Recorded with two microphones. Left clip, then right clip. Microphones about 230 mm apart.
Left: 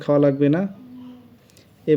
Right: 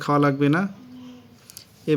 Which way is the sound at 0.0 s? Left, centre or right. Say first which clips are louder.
Left 3 dB; centre.